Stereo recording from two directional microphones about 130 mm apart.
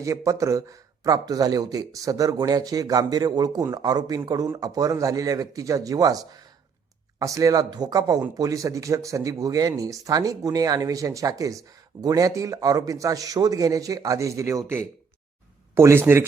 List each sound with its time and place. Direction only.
0.0 s a man's voice: 25° right (ahead or behind)